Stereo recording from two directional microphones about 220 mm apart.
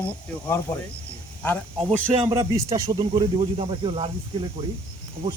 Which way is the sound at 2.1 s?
30° right (ahead or behind).